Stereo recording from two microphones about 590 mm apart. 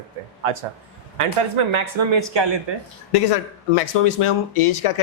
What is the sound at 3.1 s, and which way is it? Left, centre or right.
Speech, left.